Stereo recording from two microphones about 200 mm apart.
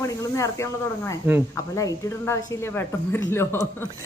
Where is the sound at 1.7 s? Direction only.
15° left (ahead or behind).